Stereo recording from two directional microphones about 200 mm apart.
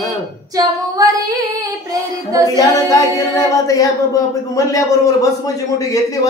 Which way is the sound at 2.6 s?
15° left (ahead or behind).